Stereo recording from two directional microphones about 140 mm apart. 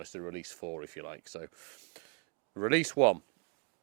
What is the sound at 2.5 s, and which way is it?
Speech, 20° right (ahead or behind).